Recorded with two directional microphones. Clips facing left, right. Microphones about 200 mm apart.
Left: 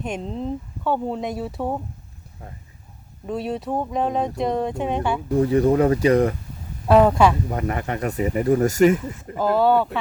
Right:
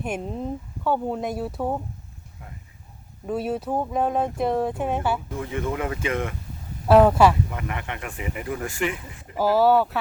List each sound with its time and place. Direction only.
0.0 s speech: 10° right (ahead or behind)
3.2 s speech: 5° right (ahead or behind)
5.3 s speech: 35° left (ahead or behind)
6.8 s speech: 5° right (ahead or behind)
7.5 s speech: 40° left (ahead or behind)
9.3 s speech: 5° right (ahead or behind)